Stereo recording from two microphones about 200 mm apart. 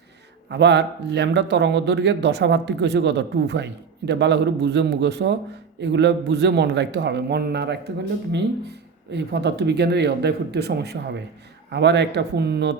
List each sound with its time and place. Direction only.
0.5 s speech: 60° right (ahead or behind)
9.1 s speech: 55° right (ahead or behind)